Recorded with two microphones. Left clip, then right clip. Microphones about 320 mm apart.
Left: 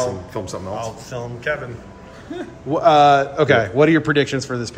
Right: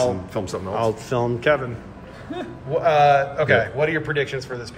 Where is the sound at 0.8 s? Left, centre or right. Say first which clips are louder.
Right 6 dB; right.